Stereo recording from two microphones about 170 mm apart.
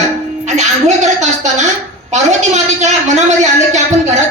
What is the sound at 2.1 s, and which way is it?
A woman's voice, 45° right (ahead or behind).